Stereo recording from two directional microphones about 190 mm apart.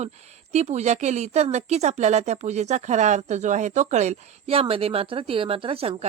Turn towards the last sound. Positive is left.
turn(degrees=-30)  # may be behind; listen again after turning